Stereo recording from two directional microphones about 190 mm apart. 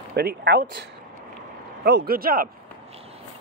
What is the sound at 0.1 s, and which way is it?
Speech, 55° right (ahead or behind).